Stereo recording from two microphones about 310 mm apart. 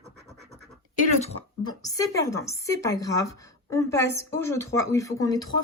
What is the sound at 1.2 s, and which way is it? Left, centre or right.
A woman's voice, centre.